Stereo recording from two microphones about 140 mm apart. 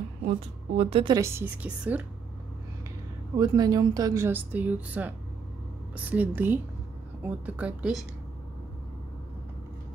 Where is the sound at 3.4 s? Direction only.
30° right (ahead or behind); by 8.0 s 10° right (ahead or behind).